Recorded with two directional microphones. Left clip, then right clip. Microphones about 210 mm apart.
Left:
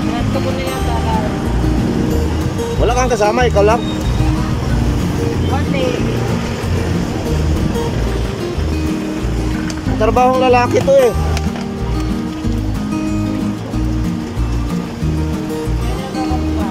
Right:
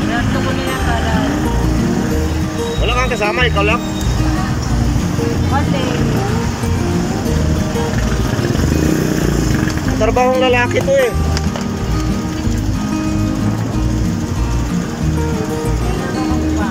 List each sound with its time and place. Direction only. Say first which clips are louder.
2.9 s speech: left 3 dB; 25° left (ahead or behind)
10.0 s speech: left 2 dB; 15° left (ahead or behind)